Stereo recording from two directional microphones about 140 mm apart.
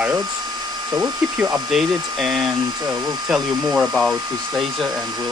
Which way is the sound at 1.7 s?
Centre (ahead or behind).